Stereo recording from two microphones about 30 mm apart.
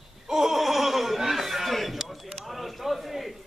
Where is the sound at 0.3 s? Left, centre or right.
Centre.